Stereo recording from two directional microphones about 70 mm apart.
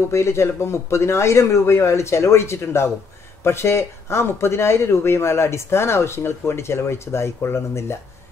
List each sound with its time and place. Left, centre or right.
0.1 s speech: left